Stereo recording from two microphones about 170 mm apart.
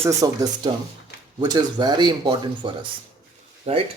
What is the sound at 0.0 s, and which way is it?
Speech, 20° right (ahead or behind).